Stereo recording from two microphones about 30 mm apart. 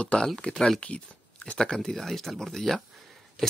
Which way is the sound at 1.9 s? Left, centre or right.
Centre.